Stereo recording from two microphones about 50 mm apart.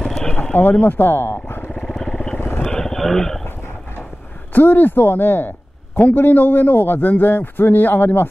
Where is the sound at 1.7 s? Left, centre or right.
Centre.